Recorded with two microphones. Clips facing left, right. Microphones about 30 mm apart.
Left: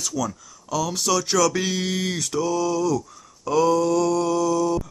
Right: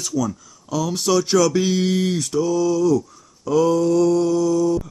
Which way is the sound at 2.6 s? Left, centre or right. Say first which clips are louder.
Right 4 dB; centre.